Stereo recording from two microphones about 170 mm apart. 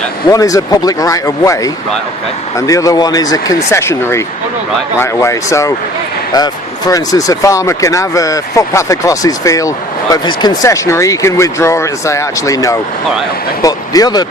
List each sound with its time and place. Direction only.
0.3 s speech: 20° left (ahead or behind)